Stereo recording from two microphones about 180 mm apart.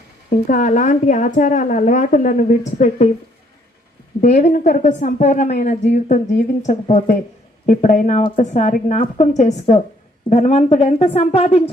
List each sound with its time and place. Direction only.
0.3 s a woman's voice: 45° left (ahead or behind)
4.2 s a woman's voice: 40° left (ahead or behind)